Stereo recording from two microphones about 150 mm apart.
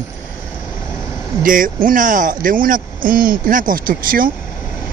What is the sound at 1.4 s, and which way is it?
Speech, 65° right (ahead or behind).